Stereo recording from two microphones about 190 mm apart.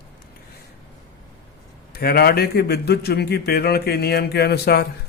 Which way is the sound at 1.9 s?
55° left (ahead or behind).